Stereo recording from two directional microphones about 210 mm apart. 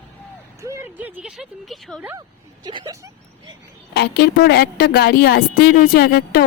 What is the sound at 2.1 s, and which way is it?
Speech, 20° right (ahead or behind).